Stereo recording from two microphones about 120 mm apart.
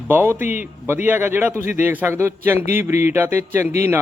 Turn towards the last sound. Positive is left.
turn(degrees=-20)  # may be behind; listen again after turning